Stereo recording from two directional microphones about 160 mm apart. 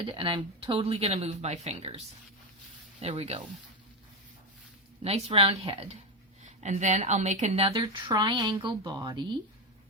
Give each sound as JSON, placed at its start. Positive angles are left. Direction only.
{"t": 0.0, "sound": "a woman's voice", "side_deg": -30}
{"t": 3.0, "sound": "a woman's voice", "side_deg": -40}
{"t": 5.0, "sound": "a woman's voice", "side_deg": -35}
{"t": 6.4, "sound": "a woman's voice", "side_deg": -45}